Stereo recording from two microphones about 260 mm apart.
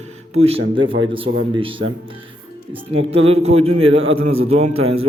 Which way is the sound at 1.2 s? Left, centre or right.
Right.